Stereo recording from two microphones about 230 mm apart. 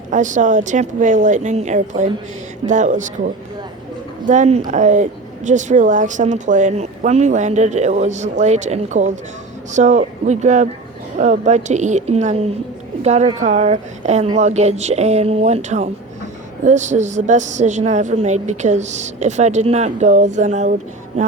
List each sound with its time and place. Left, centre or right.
0.1 s speech: right
4.3 s a woman's voice: right